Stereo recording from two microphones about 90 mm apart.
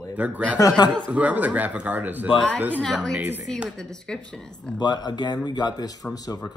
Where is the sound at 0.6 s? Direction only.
45° left (ahead or behind).